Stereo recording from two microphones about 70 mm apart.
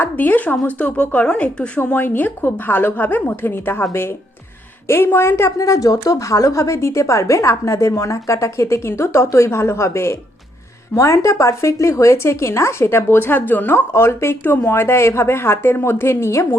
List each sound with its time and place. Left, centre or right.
0.0 s speech: left
4.9 s speech: left
5.5 s a woman's voice: left